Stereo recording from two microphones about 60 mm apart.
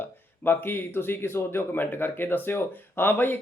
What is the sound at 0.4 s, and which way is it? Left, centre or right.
Speech, left.